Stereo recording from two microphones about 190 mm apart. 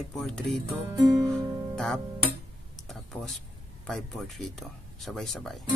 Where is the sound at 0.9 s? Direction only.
15° right (ahead or behind).